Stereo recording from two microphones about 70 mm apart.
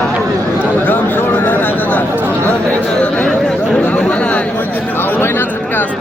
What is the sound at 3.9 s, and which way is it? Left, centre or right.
Chatter, centre.